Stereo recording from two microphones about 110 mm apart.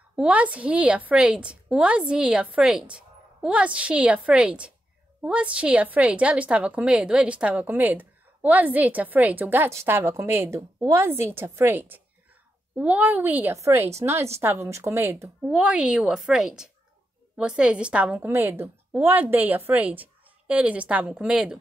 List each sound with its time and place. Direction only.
0.1 s a woman's voice: 10° right (ahead or behind)